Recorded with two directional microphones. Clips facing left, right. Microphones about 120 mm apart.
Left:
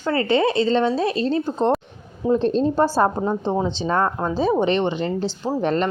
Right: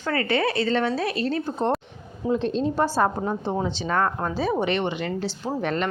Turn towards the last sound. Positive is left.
turn(degrees=35)  # may be behind; listen again after turning